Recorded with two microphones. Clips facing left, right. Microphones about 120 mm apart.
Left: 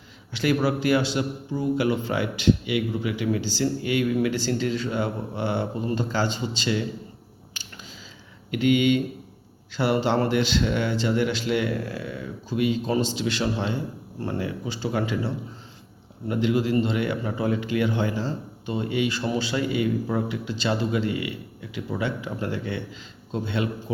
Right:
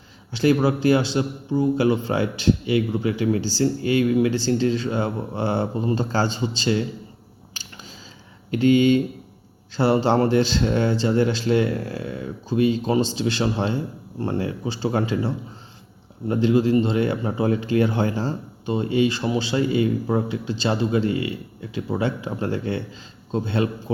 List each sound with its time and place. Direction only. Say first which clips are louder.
0.3 s speech: right 4 dB; 25° right (ahead or behind)
7.6 s a sound: right 2 dB; 30° right (ahead or behind)
8.4 s speech: right 4 dB; 35° right (ahead or behind)
16.3 s speech: right 4 dB; 30° right (ahead or behind)
18.6 s speech: right 5 dB; 30° right (ahead or behind)